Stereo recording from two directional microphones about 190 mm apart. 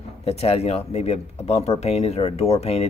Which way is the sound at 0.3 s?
30° left (ahead or behind).